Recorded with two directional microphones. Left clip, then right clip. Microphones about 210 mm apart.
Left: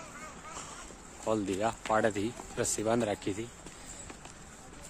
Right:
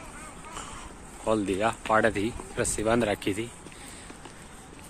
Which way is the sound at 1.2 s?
10° left (ahead or behind).